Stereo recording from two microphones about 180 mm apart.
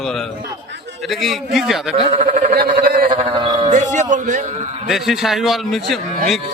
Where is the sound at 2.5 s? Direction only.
55° right (ahead or behind).